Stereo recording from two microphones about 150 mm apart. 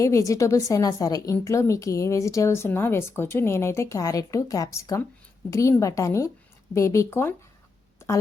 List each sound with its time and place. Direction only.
0.0 s speech: 20° left (ahead or behind)